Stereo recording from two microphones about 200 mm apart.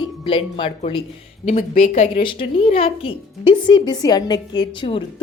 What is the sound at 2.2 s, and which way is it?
Speech, 25° left (ahead or behind).